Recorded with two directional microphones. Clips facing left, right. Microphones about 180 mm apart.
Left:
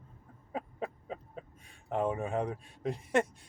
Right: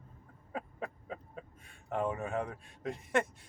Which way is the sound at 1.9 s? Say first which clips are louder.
Left 2 dB; 25° left (ahead or behind).